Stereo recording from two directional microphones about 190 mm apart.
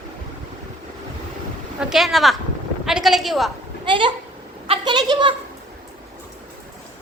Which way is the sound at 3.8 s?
25° right (ahead or behind).